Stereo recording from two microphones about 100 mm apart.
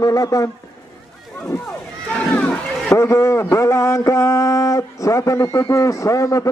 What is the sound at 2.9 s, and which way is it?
A man's voice, 30° left (ahead or behind).